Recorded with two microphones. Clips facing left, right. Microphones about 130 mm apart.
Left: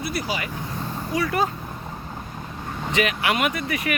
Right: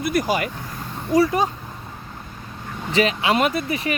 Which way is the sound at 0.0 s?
45° right (ahead or behind).